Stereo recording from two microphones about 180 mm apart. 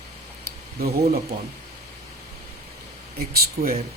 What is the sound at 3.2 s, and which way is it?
Speech, 55° right (ahead or behind).